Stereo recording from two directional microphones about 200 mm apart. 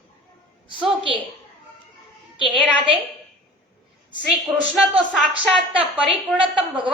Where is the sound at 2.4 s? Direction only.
25° right (ahead or behind).